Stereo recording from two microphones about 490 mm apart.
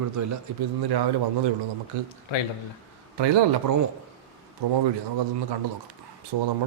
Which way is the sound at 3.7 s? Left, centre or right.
Right.